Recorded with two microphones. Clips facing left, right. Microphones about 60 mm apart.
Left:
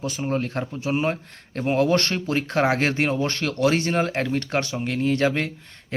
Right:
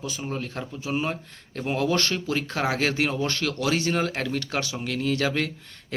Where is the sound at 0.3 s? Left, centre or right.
Left.